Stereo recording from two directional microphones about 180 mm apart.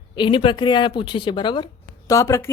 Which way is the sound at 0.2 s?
25° left (ahead or behind).